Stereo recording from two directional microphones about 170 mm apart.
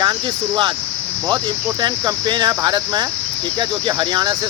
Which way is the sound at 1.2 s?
25° right (ahead or behind).